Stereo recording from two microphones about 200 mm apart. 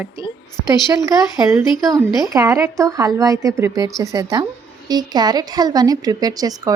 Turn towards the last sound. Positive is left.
turn(degrees=-20)  # may be behind; listen again after turning